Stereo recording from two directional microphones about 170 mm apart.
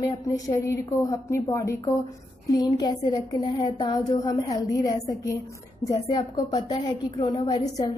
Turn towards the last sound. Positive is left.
turn(degrees=25)  # may be behind; listen again after turning